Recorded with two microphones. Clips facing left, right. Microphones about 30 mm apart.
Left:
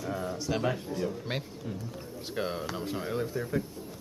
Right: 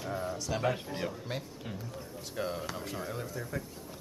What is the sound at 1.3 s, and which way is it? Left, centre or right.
Speech, left.